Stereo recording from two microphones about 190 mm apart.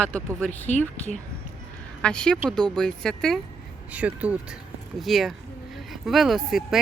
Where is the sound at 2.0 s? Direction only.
5° left (ahead or behind).